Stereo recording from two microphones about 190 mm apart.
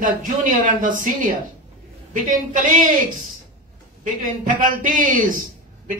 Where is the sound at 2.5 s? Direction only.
45° right (ahead or behind).